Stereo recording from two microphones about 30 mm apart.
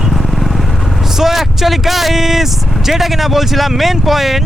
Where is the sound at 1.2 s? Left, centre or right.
Centre.